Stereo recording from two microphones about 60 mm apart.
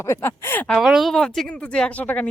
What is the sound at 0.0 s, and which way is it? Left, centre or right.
Speech, left.